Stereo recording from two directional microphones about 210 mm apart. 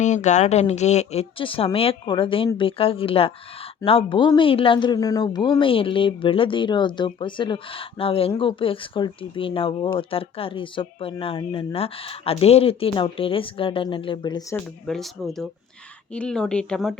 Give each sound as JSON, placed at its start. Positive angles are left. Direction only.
{"t": 0.0, "sound": "speech", "side_deg": 35}
{"t": 14.5, "sound": "speech", "side_deg": 0}